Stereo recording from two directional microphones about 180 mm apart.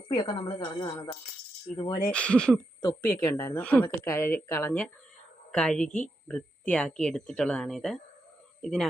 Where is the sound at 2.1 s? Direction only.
5° left (ahead or behind).